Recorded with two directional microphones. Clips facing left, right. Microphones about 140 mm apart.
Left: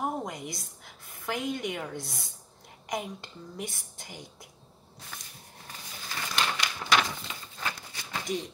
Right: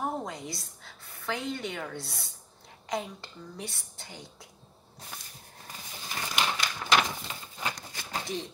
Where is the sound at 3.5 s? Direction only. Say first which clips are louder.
Left 5 dB; 15° left (ahead or behind).